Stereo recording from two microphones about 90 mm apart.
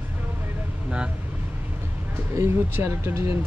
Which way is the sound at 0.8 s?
10° right (ahead or behind).